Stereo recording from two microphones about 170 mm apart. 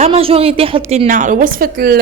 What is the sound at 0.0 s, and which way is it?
A woman's voice, 35° right (ahead or behind).